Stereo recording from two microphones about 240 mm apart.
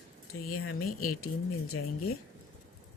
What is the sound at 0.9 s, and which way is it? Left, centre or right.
Speech, left.